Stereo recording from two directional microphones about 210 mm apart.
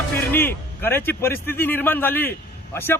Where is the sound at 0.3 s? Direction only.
10° left (ahead or behind).